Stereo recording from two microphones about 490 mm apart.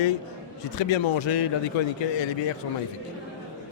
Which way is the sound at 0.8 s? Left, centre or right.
Left.